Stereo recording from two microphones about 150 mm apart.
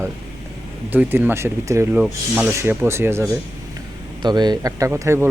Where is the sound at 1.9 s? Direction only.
5° right (ahead or behind).